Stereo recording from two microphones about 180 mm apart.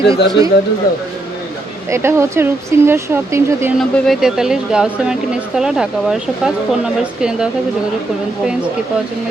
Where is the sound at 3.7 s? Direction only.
5° left (ahead or behind).